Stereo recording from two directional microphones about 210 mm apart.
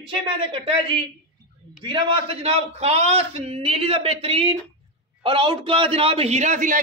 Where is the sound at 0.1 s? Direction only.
25° right (ahead or behind).